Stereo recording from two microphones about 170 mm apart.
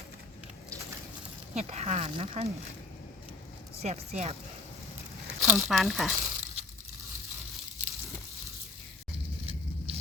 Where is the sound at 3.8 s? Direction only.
40° right (ahead or behind).